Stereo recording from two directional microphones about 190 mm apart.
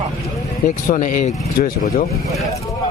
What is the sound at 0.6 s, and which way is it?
Speech, 45° left (ahead or behind).